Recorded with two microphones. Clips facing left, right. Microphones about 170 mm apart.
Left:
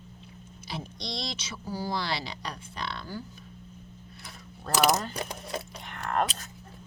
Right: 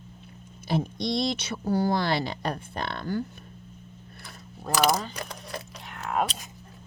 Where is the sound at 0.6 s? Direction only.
50° right (ahead or behind).